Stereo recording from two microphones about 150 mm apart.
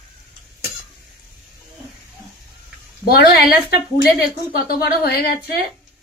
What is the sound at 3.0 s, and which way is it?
A woman's voice, 90° left.